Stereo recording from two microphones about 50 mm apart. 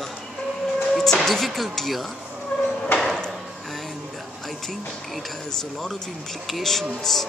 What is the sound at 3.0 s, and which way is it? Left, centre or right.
Drawer open or close, centre.